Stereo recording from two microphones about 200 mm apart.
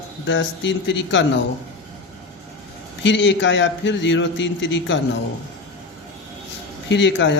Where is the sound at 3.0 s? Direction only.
65° left (ahead or behind).